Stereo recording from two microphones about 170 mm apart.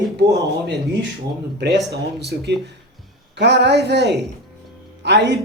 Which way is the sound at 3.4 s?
90° right.